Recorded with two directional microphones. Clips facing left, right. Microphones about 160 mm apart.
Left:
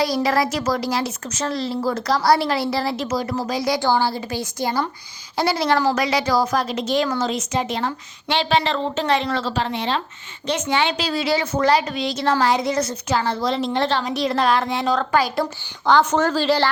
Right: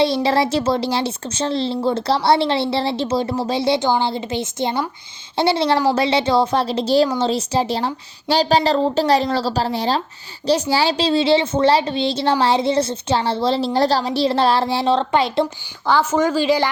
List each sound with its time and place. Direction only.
0.0 s a woman's voice: 30° right (ahead or behind)
15.9 s a woman's voice: 5° right (ahead or behind)